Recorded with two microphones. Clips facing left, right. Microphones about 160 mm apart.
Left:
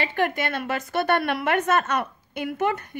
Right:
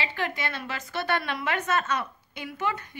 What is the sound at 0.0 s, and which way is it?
Speech, 55° left (ahead or behind).